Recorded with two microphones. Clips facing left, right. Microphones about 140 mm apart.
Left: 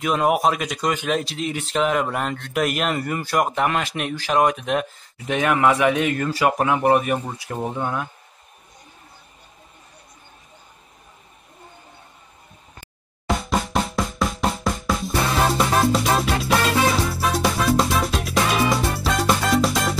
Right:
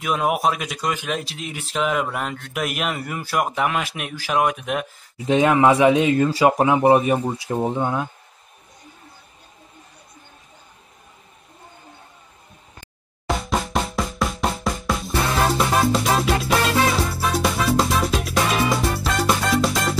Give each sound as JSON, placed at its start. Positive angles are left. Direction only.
{"t": 0.0, "sound": "speech", "side_deg": 0}
{"t": 5.1, "sound": "speech", "side_deg": -25}
{"t": 13.3, "sound": "music", "side_deg": 0}